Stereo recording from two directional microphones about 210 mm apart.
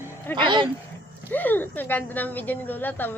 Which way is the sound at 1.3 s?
10° left (ahead or behind).